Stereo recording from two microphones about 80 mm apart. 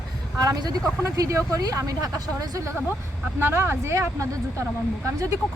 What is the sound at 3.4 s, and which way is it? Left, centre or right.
Speech, right.